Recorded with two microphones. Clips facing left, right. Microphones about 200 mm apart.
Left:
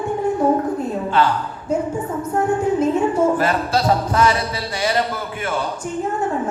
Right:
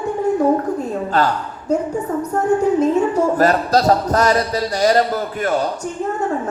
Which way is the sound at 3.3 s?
40° right (ahead or behind).